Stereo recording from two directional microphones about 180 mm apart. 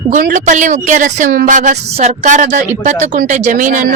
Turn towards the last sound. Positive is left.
turn(degrees=-45)  # may be behind; listen again after turning